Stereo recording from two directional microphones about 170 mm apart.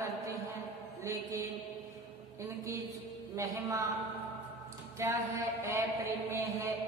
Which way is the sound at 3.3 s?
20° right (ahead or behind).